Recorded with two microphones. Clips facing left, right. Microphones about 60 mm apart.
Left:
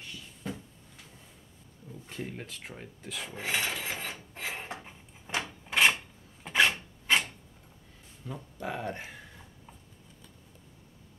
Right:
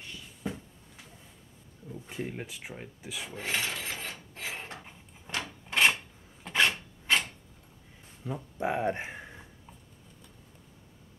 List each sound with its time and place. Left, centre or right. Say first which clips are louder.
0.4 s a sound: right 2 dB; centre
1.9 s speech: right 3 dB; centre
4.6 s dishes: left 3 dB; centre
5.3 s drawer open or close: left 1 dB; centre
6.4 s filing: left 1 dB; centre
8.3 s speech: right 5 dB; right